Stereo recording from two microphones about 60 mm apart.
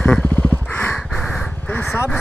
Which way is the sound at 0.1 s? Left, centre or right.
Centre.